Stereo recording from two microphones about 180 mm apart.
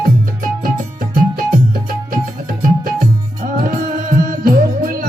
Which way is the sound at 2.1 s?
50° right (ahead or behind).